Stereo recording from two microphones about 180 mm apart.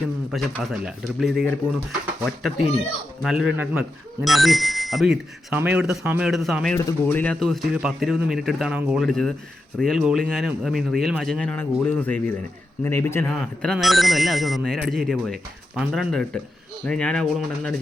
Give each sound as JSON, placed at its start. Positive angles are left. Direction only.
{"t": 0.3, "sound": "speech", "side_deg": 0}
{"t": 3.2, "sound": "speech", "side_deg": 0}
{"t": 6.7, "sound": "speech", "side_deg": 15}